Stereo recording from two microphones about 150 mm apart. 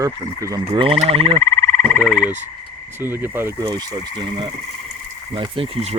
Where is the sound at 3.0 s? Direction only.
15° right (ahead or behind).